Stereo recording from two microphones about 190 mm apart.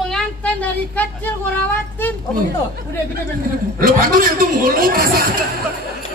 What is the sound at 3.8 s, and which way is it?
A man's voice, 50° right (ahead or behind).